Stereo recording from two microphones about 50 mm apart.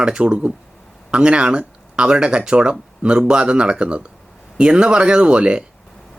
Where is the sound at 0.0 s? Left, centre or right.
Right.